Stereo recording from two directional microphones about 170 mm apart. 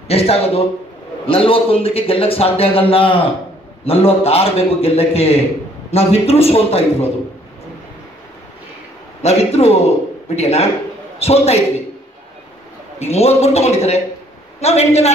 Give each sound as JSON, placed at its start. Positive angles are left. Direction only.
{"t": 0.1, "sound": "a man's voice", "side_deg": 35}
{"t": 9.2, "sound": "a man's voice", "side_deg": 40}
{"t": 13.0, "sound": "a man's voice", "side_deg": 40}